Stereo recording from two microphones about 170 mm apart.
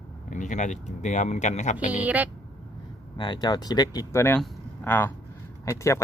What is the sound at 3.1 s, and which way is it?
Speech, 25° left (ahead or behind).